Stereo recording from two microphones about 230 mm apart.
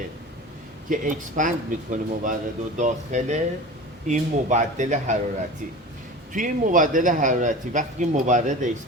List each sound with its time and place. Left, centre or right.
0.9 s speech: right
6.3 s speech: right